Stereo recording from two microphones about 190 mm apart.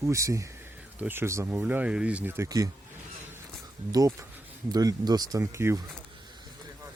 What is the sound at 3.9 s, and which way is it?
Speech, 15° right (ahead or behind).